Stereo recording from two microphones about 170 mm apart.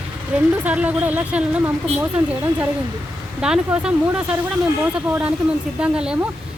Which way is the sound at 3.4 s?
5° right (ahead or behind).